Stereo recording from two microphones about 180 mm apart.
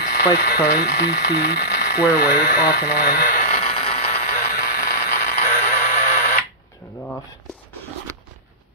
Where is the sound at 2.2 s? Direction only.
55° left (ahead or behind).